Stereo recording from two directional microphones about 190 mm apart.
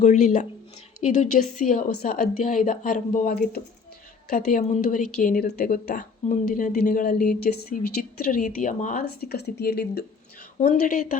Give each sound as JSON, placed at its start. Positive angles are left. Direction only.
{"t": 0.0, "sound": "a woman's voice", "side_deg": 40}
{"t": 10.6, "sound": "a woman's voice", "side_deg": 45}